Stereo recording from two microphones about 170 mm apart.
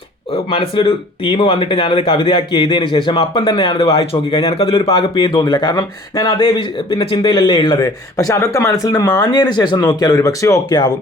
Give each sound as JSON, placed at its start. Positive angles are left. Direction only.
{"t": 0.5, "sound": "speech", "side_deg": 30}